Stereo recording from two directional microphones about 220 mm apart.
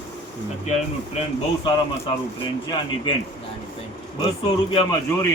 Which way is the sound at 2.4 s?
20° left (ahead or behind).